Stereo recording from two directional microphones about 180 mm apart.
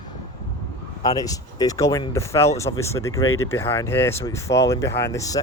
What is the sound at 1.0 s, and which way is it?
Speech, 20° left (ahead or behind).